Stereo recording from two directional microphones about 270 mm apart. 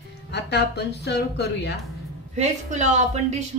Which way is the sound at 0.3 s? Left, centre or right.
Left.